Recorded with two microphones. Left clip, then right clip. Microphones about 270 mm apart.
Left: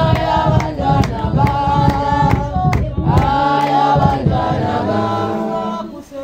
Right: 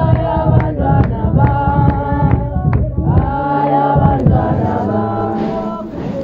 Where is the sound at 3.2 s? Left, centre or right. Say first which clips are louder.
Left 2 dB; left.